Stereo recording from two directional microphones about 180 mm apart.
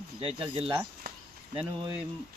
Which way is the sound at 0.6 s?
5° right (ahead or behind).